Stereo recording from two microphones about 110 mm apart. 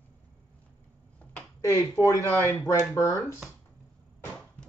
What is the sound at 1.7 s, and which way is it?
Speech, 30° left (ahead or behind).